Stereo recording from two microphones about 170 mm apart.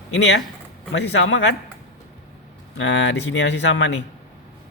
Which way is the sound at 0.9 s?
90° left.